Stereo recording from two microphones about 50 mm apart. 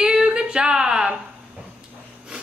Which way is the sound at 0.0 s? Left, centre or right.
Centre.